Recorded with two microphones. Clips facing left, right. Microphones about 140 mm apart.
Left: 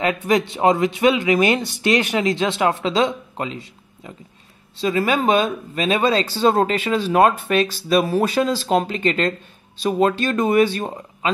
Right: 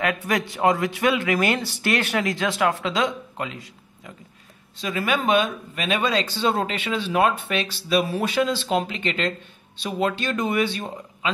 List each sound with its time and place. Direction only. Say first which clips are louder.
0.0 s speech: left 5 dB; 20° left (ahead or behind); by 11.3 s 45° left (ahead or behind)